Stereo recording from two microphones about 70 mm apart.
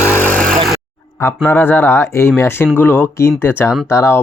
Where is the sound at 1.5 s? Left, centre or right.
Left.